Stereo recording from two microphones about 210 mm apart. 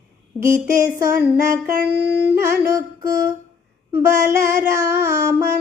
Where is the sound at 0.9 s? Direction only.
15° right (ahead or behind).